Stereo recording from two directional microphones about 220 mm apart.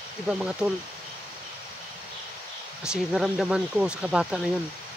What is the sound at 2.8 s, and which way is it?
Speech, 5° right (ahead or behind).